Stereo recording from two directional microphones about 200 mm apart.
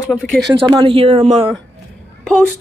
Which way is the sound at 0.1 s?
5° left (ahead or behind).